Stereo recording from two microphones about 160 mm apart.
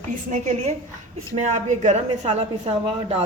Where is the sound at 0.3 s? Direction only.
45° right (ahead or behind).